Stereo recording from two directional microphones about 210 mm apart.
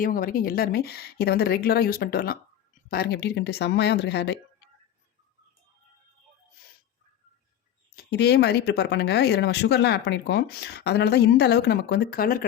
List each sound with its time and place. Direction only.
0.0 s speech: 40° left (ahead or behind)
7.9 s speech: 50° left (ahead or behind)